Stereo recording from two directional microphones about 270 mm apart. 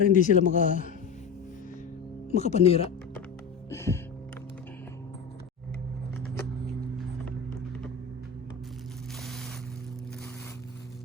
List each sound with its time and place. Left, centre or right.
0.0 s speech: left
2.3 s speech: left
3.7 s music: centre